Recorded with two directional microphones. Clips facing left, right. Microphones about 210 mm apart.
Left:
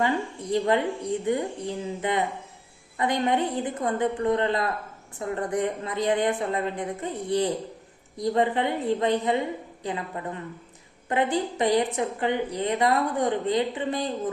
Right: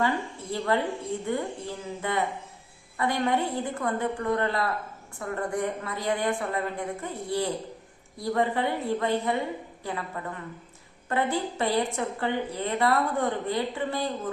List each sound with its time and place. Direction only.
0.5 s a woman's voice: 20° left (ahead or behind)